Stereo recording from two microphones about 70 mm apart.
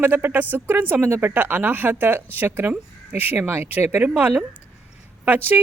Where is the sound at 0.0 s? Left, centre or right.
Right.